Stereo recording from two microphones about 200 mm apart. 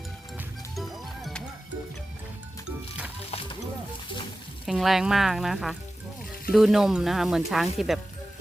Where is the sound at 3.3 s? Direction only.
30° left (ahead or behind).